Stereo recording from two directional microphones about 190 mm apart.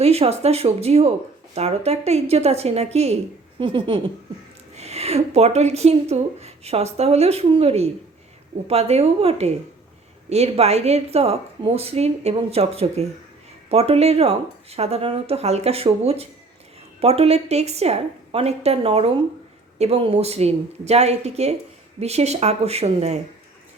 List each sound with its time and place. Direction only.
0.0 s speech: 35° right (ahead or behind)